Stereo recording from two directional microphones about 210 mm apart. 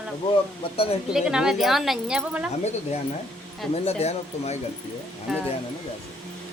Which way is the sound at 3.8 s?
30° left (ahead or behind).